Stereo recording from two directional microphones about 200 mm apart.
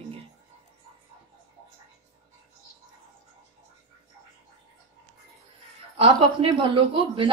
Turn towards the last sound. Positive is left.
turn(degrees=-25)  # may be behind; listen again after turning